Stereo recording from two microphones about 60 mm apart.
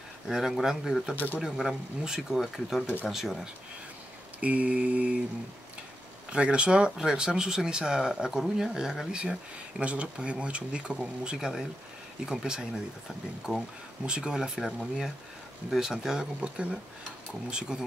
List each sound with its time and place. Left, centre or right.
0.3 s speech: centre
1.1 s speech: left
1.4 s speech: centre
4.4 s a sound: right
6.3 s speech: centre